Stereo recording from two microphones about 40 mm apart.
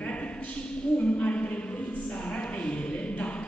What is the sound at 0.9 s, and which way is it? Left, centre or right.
Speech, left.